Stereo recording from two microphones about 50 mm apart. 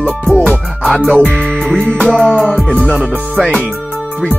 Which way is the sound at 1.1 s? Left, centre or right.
Right.